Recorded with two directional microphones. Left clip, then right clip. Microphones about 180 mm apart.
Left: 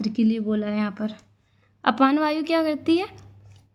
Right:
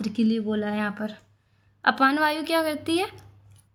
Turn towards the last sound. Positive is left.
turn(degrees=30)  # may be behind; listen again after turning